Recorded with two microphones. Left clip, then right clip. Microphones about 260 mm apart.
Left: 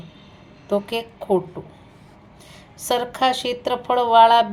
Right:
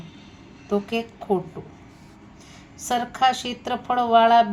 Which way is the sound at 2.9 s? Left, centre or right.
Left.